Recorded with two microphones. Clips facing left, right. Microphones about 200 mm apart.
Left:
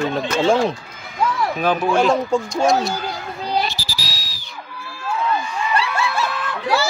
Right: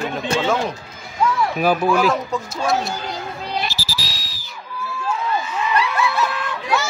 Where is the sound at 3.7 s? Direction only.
Centre (ahead or behind).